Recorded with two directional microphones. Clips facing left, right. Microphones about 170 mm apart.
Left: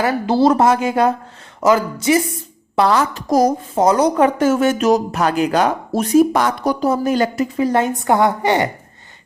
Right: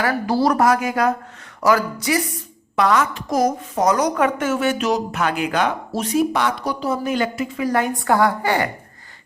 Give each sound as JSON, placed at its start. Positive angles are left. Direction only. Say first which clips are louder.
{"t": 0.0, "sound": "a woman's voice", "louder": "left 4 dB", "side_deg": 25}